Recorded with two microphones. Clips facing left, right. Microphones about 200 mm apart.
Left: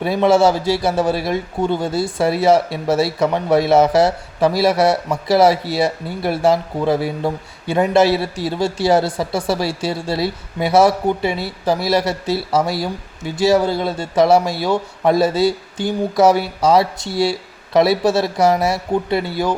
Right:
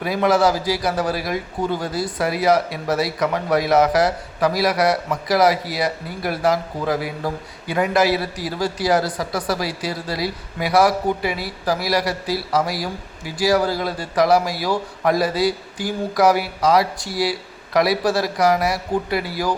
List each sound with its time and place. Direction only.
0.0 s a man's voice: 25° left (ahead or behind)